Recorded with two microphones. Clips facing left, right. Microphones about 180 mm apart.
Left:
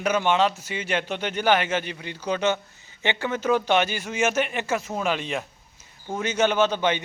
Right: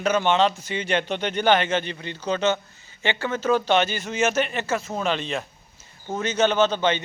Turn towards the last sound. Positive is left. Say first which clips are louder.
# right 1 dB
turn(degrees=15)  # may be behind; listen again after turning